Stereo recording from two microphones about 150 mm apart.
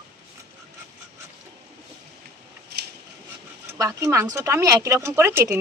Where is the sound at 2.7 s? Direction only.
90° right.